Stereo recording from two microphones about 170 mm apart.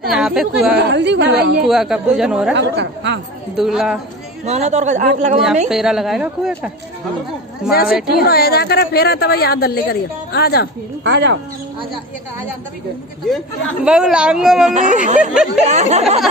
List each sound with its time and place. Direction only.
0.1 s a woman's voice: 5° right (ahead or behind)
0.7 s a woman's voice: 90° right
1.6 s a woman's voice: 5° right (ahead or behind)
2.5 s speech: 90° right
3.5 s a woman's voice: 5° right (ahead or behind)
4.5 s speech: 40° right (ahead or behind)
5.7 s a woman's voice: 5° right (ahead or behind)
7.7 s speech: 60° left (ahead or behind)
11.1 s speech: 90° right
13.8 s a woman's voice: 5° right (ahead or behind)
14.7 s speech: 45° right (ahead or behind)